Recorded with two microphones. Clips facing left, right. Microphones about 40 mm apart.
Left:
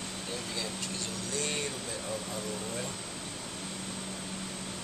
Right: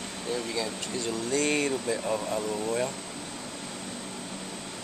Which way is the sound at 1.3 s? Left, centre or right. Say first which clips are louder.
Right 9 dB; right.